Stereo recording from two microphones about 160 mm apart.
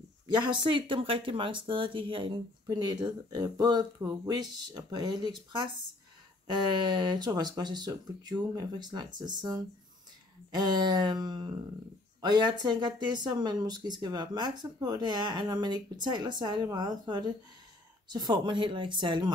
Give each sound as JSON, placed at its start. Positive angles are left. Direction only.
{"t": 0.3, "sound": "speech", "side_deg": -30}